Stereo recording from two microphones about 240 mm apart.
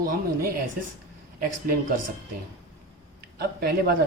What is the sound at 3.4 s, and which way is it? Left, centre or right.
Speech, right.